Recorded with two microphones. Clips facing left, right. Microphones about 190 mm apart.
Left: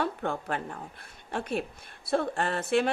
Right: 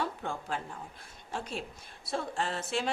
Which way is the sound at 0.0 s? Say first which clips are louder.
Left 5 dB; 60° left (ahead or behind).